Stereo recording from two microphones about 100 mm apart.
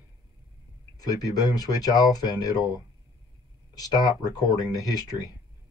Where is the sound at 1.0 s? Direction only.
40° left (ahead or behind).